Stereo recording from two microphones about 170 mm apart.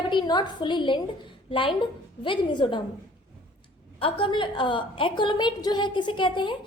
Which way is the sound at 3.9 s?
30° left (ahead or behind).